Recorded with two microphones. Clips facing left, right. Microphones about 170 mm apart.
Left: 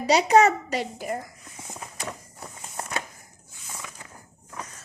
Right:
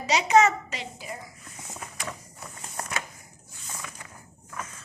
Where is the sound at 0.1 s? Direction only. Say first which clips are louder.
Left 3 dB; 35° left (ahead or behind); by 1.2 s 50° left (ahead or behind).